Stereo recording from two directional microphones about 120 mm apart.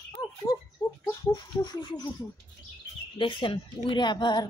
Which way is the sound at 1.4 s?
35° left (ahead or behind).